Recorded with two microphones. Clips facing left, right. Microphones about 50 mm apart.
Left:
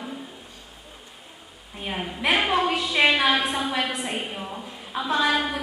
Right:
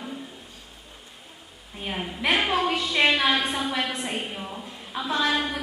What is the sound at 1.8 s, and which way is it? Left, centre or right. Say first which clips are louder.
A woman's voice: left 1 dB; centre.